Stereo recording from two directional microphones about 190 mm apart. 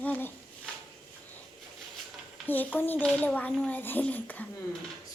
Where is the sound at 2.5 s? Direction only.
10° left (ahead or behind).